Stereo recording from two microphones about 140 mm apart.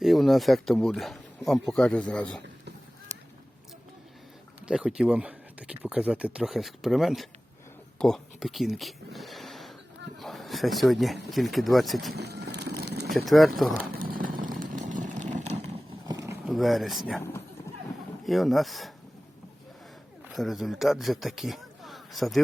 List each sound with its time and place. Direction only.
0.0 s speech: centre (ahead or behind)
4.6 s speech: 5° right (ahead or behind)
13.1 s speech: centre (ahead or behind)
13.9 s vehicle: 90° right; by 15.8 s 50° right (ahead or behind)
16.0 s vehicle: 20° right (ahead or behind)
16.5 s speech: centre (ahead or behind)
17.2 s speech: 15° left (ahead or behind)
18.3 s speech: centre (ahead or behind)
20.3 s a man's voice: centre (ahead or behind)